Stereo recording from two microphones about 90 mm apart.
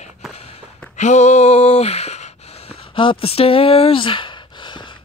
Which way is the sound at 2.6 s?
90° left.